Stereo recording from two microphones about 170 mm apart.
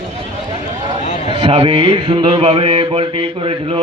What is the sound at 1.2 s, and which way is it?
Mantra, 30° right (ahead or behind).